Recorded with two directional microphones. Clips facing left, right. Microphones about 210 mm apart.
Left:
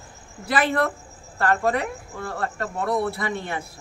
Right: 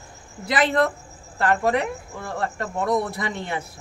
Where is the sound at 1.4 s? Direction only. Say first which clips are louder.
Right 1 dB; 15° right (ahead or behind).